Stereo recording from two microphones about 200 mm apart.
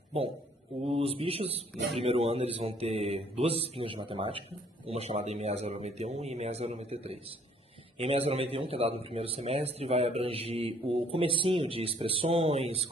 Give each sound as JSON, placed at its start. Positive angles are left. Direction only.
{"t": 0.8, "sound": "a man's voice", "side_deg": -30}